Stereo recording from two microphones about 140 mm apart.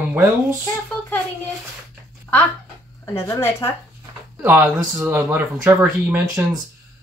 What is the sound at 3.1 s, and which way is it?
Speech, 20° left (ahead or behind).